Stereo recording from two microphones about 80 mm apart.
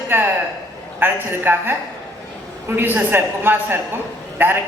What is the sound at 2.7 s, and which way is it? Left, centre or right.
A woman's voice, right.